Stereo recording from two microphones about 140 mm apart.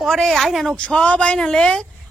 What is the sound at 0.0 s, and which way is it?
A woman's voice, centre (ahead or behind).